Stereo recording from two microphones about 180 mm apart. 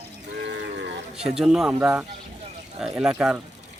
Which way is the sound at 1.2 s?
5° right (ahead or behind).